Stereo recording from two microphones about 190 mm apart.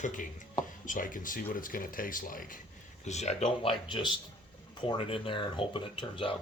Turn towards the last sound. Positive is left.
turn(degrees=25)  # may be behind; listen again after turning